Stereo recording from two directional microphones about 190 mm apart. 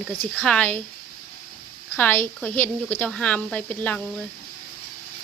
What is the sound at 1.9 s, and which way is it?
Speech, 10° left (ahead or behind).